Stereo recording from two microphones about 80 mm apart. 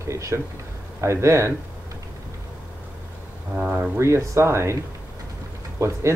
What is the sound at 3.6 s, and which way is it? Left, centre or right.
Speech, centre.